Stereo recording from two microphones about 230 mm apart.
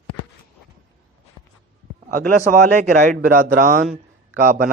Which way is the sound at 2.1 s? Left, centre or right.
Right.